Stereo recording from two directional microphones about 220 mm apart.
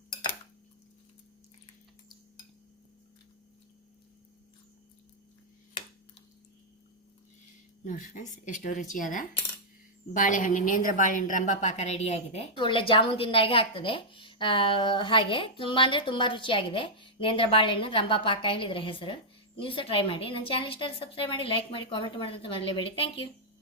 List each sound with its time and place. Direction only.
7.9 s a woman's voice: 35° left (ahead or behind)